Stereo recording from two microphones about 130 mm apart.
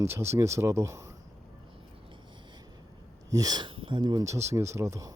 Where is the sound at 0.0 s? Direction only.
20° right (ahead or behind).